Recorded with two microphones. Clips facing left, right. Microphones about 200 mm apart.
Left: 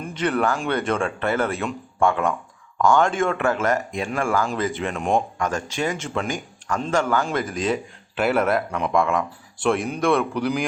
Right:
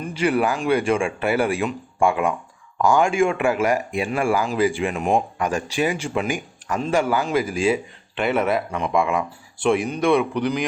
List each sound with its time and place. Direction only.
0.0 s speech: 10° right (ahead or behind)